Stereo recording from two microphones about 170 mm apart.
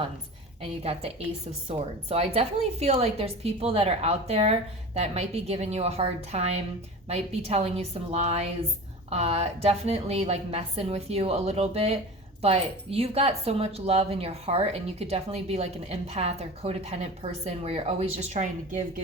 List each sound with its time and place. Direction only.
0.6 s speech: 35° right (ahead or behind)